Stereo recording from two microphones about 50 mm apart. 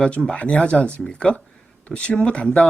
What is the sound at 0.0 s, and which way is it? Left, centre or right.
Speech, centre.